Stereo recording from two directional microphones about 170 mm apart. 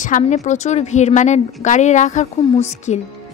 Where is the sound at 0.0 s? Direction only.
45° left (ahead or behind).